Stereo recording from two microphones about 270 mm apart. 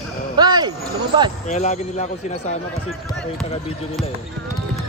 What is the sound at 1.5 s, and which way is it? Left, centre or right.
Speech, left.